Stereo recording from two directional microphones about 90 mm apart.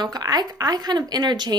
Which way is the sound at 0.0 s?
50° right (ahead or behind).